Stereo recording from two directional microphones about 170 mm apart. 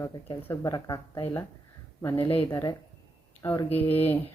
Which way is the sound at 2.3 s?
30° left (ahead or behind).